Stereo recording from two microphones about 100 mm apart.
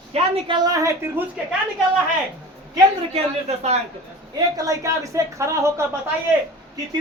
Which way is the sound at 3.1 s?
90° right.